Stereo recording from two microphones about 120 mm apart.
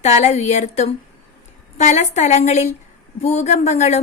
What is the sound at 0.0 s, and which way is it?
A woman's voice, 70° left (ahead or behind).